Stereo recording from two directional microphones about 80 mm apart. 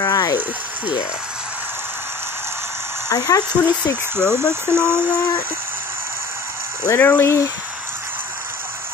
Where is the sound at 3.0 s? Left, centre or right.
Left.